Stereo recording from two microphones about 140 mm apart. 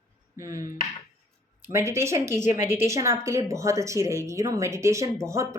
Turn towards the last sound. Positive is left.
turn(degrees=-20)  # may be behind; listen again after turning